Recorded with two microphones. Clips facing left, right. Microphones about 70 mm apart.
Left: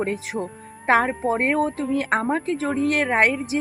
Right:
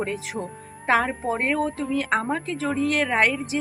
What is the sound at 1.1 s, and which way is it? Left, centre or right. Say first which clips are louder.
A woman's voice: left 3 dB; left.